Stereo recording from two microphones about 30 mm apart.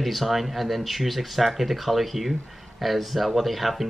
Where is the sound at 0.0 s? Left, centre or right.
Centre.